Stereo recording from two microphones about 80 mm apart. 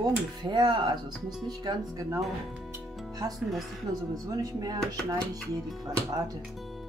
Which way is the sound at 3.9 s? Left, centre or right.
Right.